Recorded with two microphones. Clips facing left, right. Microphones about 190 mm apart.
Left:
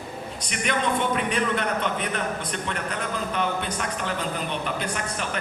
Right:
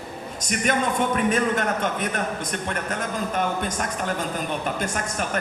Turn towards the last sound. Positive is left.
turn(degrees=-45)  # may be behind; listen again after turning